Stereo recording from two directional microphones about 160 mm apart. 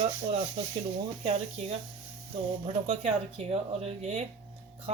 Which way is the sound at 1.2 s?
40° right (ahead or behind).